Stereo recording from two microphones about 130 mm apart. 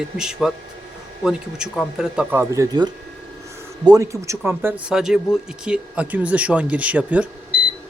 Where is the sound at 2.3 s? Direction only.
20° right (ahead or behind).